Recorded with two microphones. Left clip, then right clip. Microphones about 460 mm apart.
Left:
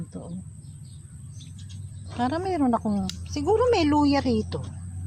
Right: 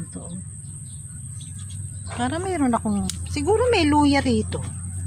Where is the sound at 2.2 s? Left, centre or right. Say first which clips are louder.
Right 1 dB; left.